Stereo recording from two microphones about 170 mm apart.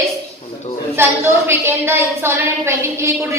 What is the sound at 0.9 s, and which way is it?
A woman's voice, 15° right (ahead or behind).